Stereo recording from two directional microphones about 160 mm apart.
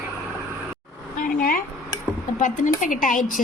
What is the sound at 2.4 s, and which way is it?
A woman's voice, 55° left (ahead or behind).